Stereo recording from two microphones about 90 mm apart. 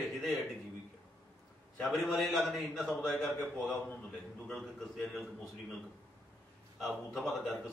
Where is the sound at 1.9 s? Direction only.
Centre (ahead or behind).